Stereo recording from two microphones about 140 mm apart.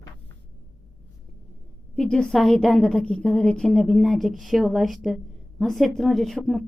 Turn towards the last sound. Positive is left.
turn(degrees=0)  # may be behind; listen again after turning